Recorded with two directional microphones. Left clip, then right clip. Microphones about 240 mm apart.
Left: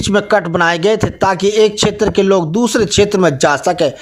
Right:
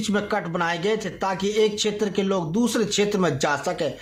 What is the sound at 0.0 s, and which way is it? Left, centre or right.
Speech, left.